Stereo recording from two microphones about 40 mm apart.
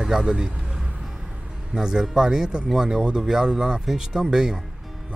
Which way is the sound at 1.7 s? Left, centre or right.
Centre.